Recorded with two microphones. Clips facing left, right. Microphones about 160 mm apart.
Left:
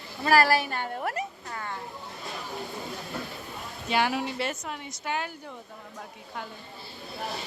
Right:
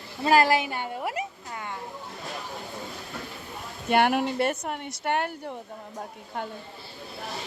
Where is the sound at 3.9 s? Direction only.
55° right (ahead or behind).